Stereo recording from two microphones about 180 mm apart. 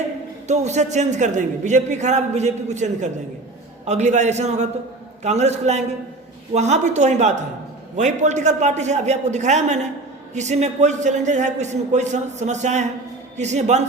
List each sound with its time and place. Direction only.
0.4 s a man's voice: 40° right (ahead or behind)